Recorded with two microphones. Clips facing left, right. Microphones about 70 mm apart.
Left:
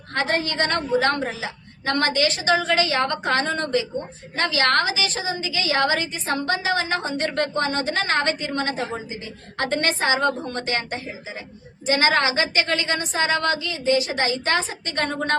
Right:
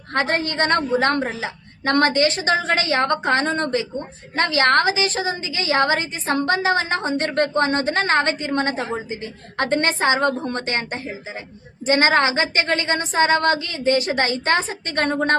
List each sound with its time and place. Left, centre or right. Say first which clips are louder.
0.1 s a woman's voice: right 2 dB; right
5.4 s a woman's voice: right 1 dB; right